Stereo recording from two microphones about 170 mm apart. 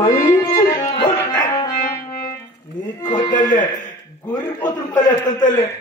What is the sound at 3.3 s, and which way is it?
Speech, 50° left (ahead or behind).